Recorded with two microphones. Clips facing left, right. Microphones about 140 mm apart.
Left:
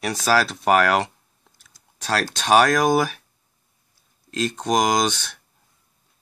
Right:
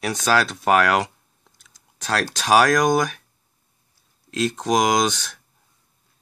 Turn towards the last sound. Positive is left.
turn(degrees=0)  # may be behind; listen again after turning